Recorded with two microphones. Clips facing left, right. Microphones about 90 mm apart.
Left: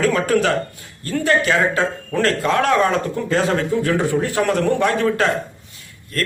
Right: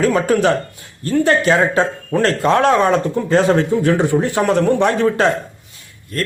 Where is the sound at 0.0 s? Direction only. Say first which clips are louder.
Right 3 dB; 25° right (ahead or behind).